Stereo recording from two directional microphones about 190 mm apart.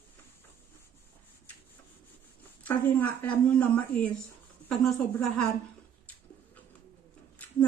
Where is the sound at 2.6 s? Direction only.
10° left (ahead or behind).